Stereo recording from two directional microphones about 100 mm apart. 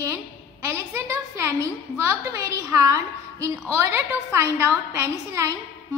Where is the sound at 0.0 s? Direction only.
30° right (ahead or behind).